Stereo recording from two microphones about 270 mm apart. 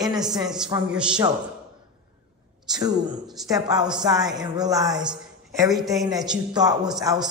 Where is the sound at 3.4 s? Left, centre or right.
Centre.